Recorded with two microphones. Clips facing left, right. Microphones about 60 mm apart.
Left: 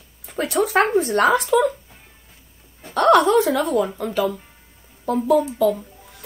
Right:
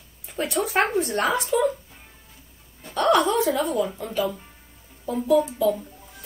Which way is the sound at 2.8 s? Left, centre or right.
Left.